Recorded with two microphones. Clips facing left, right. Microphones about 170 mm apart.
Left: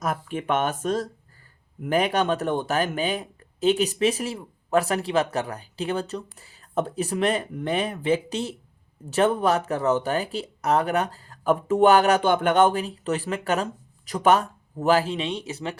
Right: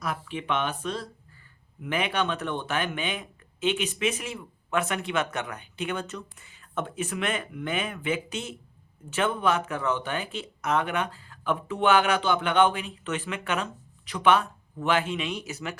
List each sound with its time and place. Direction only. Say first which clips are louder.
0.0 s speech: left 5 dB; 45° left (ahead or behind); by 15.8 s 30° left (ahead or behind)